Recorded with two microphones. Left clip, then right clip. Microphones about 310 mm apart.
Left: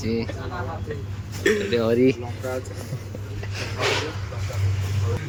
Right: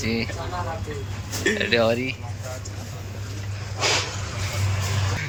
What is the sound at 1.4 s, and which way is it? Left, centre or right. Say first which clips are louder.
Speech: right 1 dB; centre.